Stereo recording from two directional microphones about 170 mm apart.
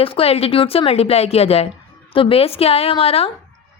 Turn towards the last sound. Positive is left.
turn(degrees=35)  # may be behind; listen again after turning